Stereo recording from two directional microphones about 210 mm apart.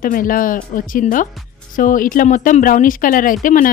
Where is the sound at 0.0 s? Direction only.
40° left (ahead or behind).